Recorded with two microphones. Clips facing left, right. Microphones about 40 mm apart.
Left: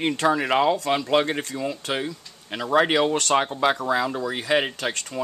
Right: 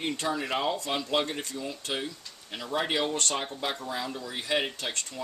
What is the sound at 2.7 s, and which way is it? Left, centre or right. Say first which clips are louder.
Speech: left 9 dB; left.